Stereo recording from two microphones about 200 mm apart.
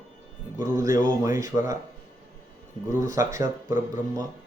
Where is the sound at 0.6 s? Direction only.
15° right (ahead or behind).